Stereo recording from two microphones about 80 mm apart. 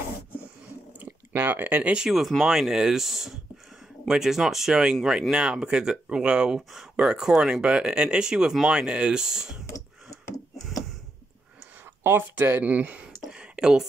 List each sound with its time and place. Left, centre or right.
1.0 s speech: right; by 9.6 s centre
12.0 s speech: right
13.3 s a sound: centre